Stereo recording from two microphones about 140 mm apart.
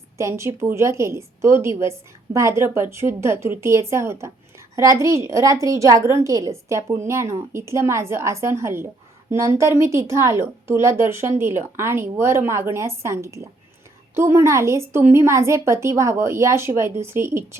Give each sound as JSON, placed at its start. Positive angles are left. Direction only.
{"t": 0.2, "sound": "a woman's voice", "side_deg": -20}